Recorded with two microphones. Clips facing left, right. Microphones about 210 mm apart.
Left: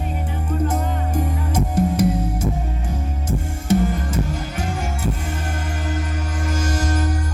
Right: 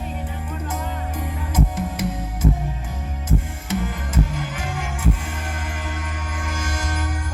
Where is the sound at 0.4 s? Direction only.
45° left (ahead or behind).